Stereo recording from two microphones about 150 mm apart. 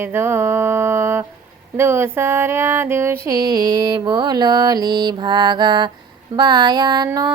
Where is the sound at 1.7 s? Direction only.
15° right (ahead or behind).